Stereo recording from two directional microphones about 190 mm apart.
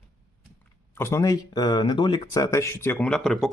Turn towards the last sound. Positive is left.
turn(degrees=0)  # may be behind; listen again after turning